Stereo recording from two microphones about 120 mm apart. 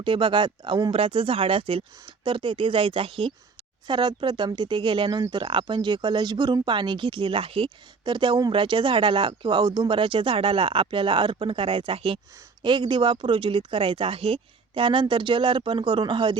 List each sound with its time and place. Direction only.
0.0 s speech: 45° right (ahead or behind)